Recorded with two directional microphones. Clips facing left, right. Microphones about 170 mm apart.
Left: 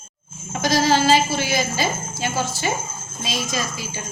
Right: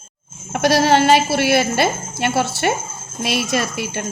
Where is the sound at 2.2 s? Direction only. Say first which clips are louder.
Right 7 dB; 70° right (ahead or behind).